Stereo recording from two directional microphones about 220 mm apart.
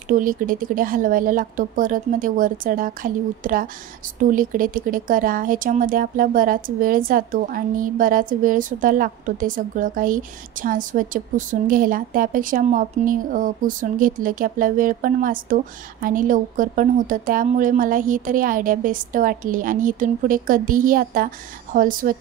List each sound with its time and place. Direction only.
0.1 s speech: 40° right (ahead or behind)